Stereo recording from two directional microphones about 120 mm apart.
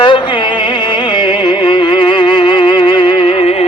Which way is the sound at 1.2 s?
40° left (ahead or behind).